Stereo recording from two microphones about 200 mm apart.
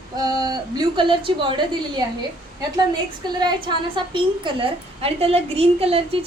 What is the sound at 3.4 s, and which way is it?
A woman's voice, 20° right (ahead or behind).